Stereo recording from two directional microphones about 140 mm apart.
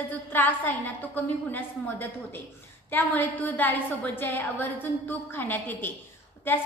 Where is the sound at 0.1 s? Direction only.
10° left (ahead or behind).